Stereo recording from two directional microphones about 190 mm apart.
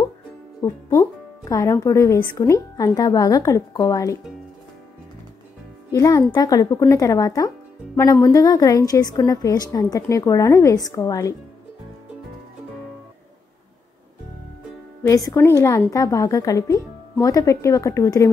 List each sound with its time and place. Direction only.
0.6 s speech: 15° left (ahead or behind)
5.9 s a child's voice: 15° left (ahead or behind)
15.0 s speech: 15° left (ahead or behind)